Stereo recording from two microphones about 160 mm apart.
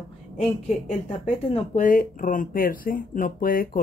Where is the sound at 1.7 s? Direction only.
60° left (ahead or behind).